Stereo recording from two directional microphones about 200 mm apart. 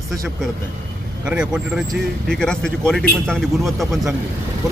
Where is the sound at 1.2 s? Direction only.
5° right (ahead or behind).